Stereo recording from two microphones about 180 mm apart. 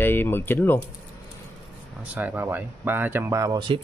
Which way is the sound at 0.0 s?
10° left (ahead or behind).